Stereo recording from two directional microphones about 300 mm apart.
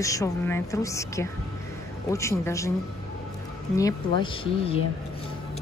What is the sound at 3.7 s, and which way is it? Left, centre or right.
A woman's voice, centre.